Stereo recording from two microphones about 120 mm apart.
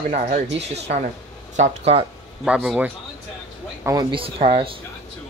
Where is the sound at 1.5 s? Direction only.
85° right.